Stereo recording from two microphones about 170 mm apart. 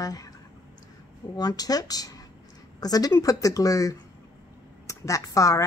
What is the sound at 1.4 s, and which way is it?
Speech, 20° left (ahead or behind).